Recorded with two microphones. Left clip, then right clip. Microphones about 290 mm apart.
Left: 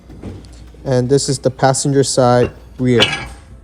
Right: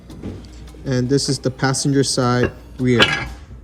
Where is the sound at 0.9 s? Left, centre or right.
Centre.